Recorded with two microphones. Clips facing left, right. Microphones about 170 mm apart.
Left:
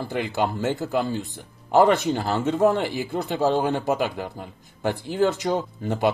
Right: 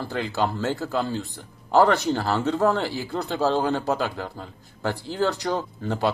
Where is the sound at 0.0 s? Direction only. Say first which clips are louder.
Left 1 dB; 15° left (ahead or behind).